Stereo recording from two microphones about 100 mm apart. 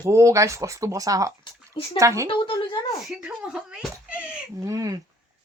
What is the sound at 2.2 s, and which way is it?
Speech, 55° left (ahead or behind).